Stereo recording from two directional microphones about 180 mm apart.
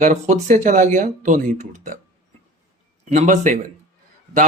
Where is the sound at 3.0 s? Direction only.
40° right (ahead or behind).